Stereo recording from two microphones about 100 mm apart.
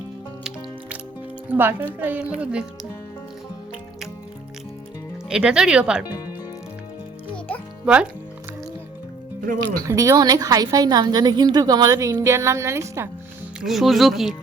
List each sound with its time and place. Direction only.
1.5 s speech: 20° right (ahead or behind)
5.3 s speech: 10° right (ahead or behind)
7.9 s speech: 10° right (ahead or behind)
9.8 s a woman's voice: 35° right (ahead or behind)
13.6 s speech: centre (ahead or behind)